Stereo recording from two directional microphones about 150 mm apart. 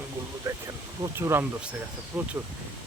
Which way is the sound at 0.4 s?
20° right (ahead or behind).